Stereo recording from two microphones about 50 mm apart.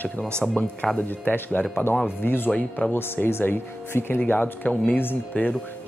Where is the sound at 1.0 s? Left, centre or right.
Left.